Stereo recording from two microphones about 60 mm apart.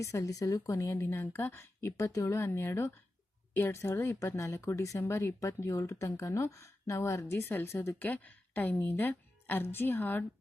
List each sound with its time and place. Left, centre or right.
0.0 s speech: left
1.0 s a woman's voice: left
2.0 s speech: left
4.4 s speech: left
7.9 s a woman's voice: left